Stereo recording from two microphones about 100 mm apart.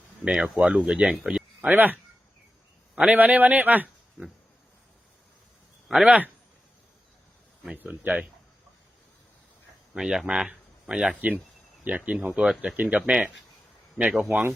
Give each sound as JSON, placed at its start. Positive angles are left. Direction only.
{"t": 0.3, "sound": "a man's voice", "side_deg": -10}
{"t": 5.9, "sound": "speech", "side_deg": -10}
{"t": 7.8, "sound": "speech", "side_deg": -15}
{"t": 9.9, "sound": "speech", "side_deg": -5}